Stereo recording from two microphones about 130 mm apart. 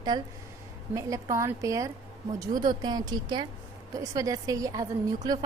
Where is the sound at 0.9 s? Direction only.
25° right (ahead or behind).